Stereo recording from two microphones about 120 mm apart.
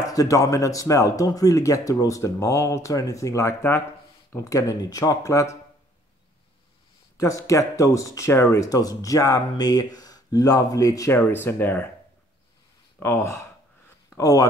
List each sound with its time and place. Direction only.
0.0 s speech: 30° left (ahead or behind)
7.2 s speech: 25° left (ahead or behind)
11.1 s speech: 20° left (ahead or behind)
13.0 s speech: 20° left (ahead or behind)